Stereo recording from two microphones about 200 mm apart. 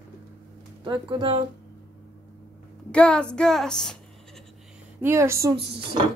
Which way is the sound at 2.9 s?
5° left (ahead or behind).